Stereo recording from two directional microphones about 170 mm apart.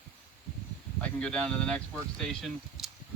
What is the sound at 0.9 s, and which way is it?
Speech, 5° left (ahead or behind).